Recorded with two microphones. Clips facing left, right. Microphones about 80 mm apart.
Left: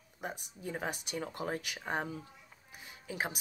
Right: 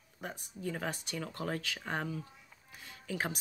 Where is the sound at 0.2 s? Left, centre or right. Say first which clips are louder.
Right 1 dB; centre.